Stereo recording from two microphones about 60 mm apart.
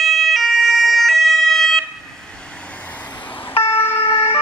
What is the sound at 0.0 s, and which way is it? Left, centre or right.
Emergency vehicle, centre.